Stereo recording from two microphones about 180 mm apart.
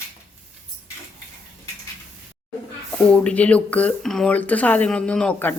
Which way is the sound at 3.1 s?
5° left (ahead or behind).